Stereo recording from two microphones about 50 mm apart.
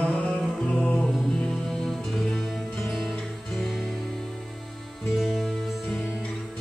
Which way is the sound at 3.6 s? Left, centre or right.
Centre.